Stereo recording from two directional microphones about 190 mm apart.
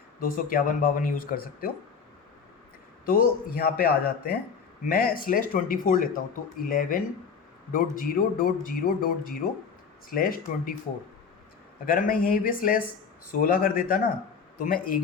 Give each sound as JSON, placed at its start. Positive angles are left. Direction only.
{"t": 0.2, "sound": "speech", "side_deg": 45}
{"t": 3.1, "sound": "speech", "side_deg": 50}
{"t": 11.9, "sound": "speech", "side_deg": 45}